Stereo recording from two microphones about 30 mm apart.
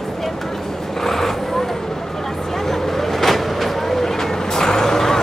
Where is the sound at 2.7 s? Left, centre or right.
Centre.